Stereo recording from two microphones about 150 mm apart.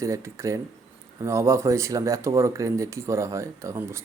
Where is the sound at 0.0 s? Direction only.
20° right (ahead or behind).